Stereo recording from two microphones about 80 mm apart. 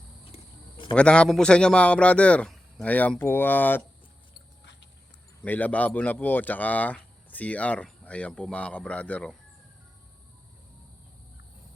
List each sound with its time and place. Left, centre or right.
0.9 s a man's voice: centre
5.5 s a man's voice: left